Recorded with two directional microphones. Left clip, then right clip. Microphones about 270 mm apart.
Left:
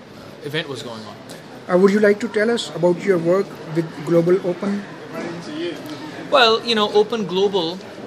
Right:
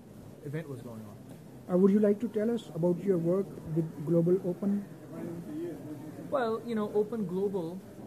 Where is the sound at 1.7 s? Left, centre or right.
Centre.